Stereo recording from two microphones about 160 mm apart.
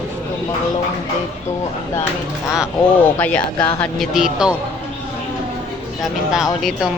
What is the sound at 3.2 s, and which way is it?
Speech, 10° left (ahead or behind).